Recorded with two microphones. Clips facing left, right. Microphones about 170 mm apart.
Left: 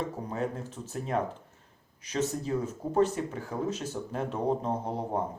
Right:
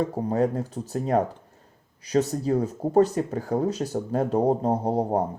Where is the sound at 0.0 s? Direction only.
35° right (ahead or behind).